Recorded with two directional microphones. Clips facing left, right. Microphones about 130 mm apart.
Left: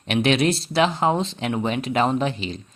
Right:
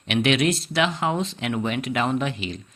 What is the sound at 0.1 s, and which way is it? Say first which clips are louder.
Speech: left 1 dB; 35° left (ahead or behind).